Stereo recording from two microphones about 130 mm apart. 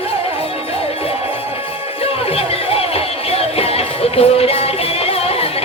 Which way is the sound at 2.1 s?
50° left (ahead or behind).